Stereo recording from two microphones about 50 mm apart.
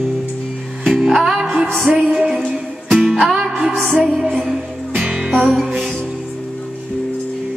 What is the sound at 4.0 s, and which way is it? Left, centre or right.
Music, centre.